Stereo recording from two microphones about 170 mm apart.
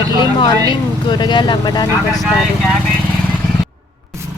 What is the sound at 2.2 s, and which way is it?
Speech, 5° left (ahead or behind).